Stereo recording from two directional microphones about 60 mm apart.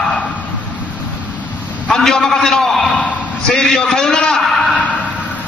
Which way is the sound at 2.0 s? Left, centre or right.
Centre.